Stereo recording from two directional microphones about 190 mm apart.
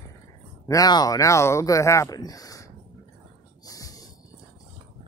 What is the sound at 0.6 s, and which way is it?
Speech, 20° left (ahead or behind).